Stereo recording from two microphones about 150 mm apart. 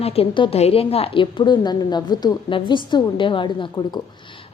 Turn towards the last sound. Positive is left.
turn(degrees=30)  # may be behind; listen again after turning